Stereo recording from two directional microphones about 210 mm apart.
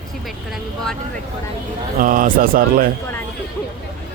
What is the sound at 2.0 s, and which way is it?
Speech, 40° right (ahead or behind).